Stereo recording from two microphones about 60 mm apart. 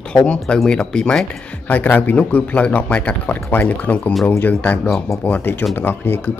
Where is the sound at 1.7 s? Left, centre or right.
Left.